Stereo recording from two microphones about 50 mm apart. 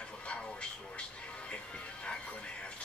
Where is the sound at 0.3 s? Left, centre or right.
Left.